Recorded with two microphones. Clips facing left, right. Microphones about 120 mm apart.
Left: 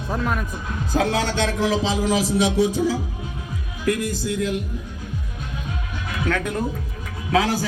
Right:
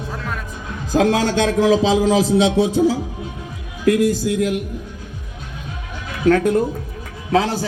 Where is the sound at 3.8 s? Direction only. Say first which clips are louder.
Right 7 dB; 75° right (ahead or behind).